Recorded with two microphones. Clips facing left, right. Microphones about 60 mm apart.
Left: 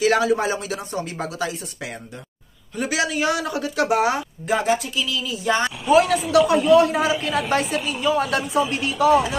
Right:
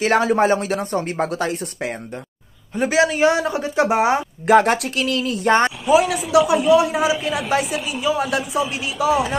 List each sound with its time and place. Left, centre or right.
0.0 s speech: right
2.7 s speech: right
4.5 s speech: right
5.9 s a woman's voice: centre